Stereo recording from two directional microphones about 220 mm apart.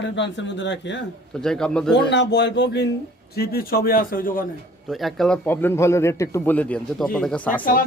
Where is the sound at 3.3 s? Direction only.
45° left (ahead or behind).